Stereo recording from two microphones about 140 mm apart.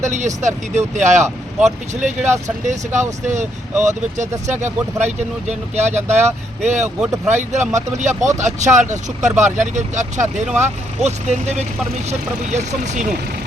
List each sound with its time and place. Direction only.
0.0 s speech: 60° right (ahead or behind)